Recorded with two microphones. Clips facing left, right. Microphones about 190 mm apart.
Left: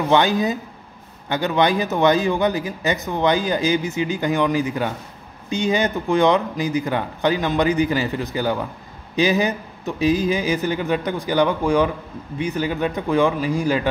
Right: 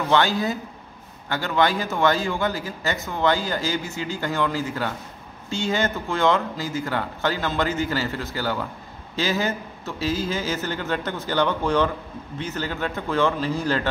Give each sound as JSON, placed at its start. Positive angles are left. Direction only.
{"t": 0.1, "sound": "a man's voice", "side_deg": 20}